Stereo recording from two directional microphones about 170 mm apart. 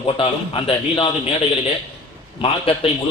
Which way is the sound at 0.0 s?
30° left (ahead or behind).